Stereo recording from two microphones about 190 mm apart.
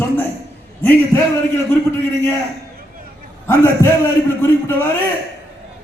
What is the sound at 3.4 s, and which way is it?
Speech, 10° left (ahead or behind).